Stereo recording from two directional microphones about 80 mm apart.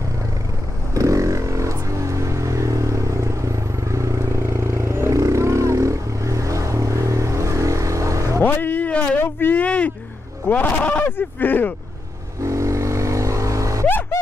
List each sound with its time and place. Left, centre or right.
0.9 s vehicle: right
8.4 s speech: left
12.4 s vehicle: right
13.8 s a sound: left